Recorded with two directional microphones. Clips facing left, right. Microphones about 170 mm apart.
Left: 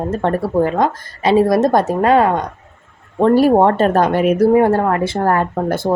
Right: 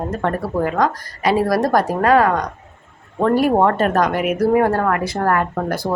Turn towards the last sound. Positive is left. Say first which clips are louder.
# left 3 dB
turn(degrees=25)  # may be behind; listen again after turning